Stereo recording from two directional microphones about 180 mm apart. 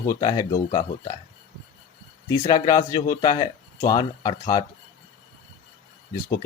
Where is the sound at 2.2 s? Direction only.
20° left (ahead or behind).